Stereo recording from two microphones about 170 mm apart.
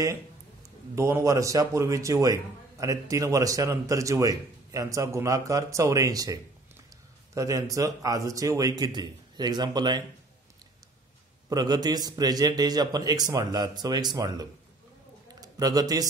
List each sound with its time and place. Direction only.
0.9 s a man's voice: 15° right (ahead or behind)
11.4 s a man's voice: 25° right (ahead or behind)